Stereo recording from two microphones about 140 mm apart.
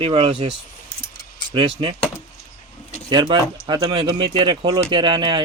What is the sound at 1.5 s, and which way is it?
Speech, 40° right (ahead or behind).